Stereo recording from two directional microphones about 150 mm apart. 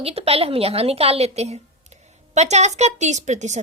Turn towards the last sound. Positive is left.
turn(degrees=-50)  # may be behind; listen again after turning